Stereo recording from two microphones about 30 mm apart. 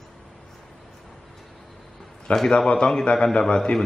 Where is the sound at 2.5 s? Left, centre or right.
Left.